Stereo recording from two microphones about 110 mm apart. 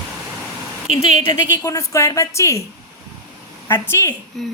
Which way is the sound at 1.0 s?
90° right.